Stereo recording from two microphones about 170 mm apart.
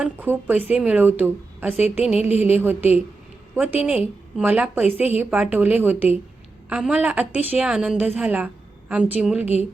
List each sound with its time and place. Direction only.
0.0 s a woman's voice: 10° right (ahead or behind)
2.3 s a woman's voice: 40° left (ahead or behind)
2.6 s a woman's voice: 10° right (ahead or behind)